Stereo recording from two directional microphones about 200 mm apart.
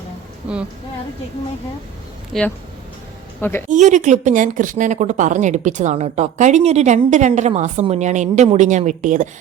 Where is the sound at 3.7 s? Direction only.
35° right (ahead or behind).